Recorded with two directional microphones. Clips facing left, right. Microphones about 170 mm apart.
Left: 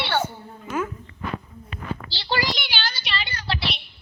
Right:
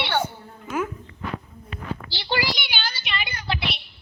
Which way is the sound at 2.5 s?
Centre (ahead or behind).